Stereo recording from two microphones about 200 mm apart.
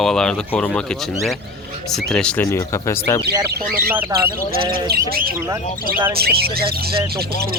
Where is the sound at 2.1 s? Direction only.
5° left (ahead or behind).